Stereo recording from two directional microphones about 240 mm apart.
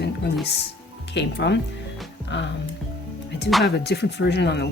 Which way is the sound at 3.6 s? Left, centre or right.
Left.